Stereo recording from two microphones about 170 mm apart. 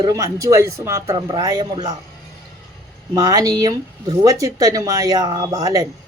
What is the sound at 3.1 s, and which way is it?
Speech, 20° right (ahead or behind).